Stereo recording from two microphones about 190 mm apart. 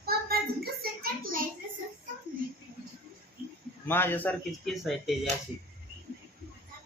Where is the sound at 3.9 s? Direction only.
10° left (ahead or behind).